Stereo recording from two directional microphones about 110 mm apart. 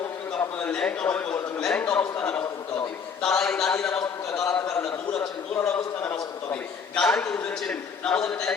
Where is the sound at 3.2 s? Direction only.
5° left (ahead or behind).